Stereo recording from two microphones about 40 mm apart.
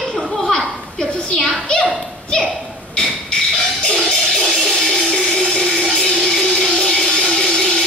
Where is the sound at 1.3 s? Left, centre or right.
Left.